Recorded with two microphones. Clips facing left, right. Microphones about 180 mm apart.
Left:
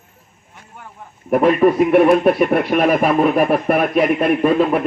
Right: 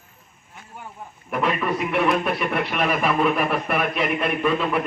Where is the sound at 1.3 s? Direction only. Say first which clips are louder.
Left 11 dB; 45° left (ahead or behind).